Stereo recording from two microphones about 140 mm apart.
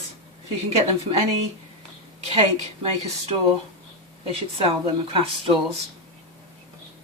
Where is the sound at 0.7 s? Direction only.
45° right (ahead or behind).